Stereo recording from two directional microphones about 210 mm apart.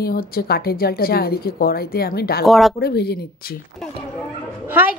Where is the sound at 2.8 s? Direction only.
50° left (ahead or behind).